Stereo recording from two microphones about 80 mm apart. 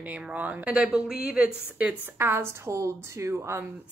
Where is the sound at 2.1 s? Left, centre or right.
Right.